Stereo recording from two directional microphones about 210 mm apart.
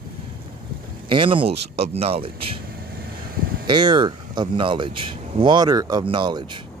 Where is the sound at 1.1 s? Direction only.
25° right (ahead or behind).